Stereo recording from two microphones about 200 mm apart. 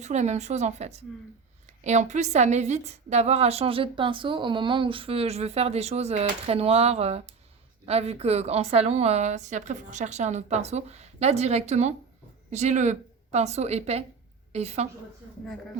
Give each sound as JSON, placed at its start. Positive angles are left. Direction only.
{"t": 0.0, "sound": "a woman's voice", "side_deg": -35}